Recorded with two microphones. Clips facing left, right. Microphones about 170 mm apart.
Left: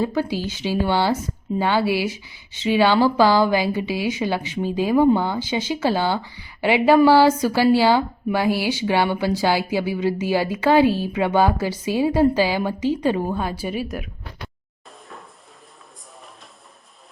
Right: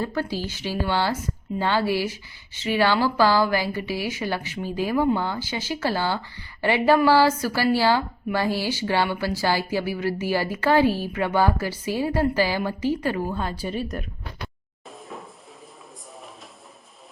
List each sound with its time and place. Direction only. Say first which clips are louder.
0.0 s speech: left 4 dB; 15° left (ahead or behind)